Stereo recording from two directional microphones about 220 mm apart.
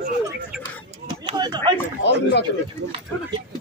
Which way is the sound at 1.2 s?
20° right (ahead or behind).